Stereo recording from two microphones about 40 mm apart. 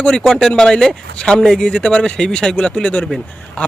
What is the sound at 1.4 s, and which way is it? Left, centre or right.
Speech, centre.